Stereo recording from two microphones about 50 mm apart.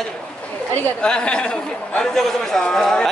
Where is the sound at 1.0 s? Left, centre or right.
Centre.